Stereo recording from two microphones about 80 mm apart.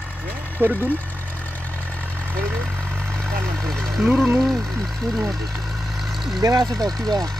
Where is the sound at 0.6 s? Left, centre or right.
Right.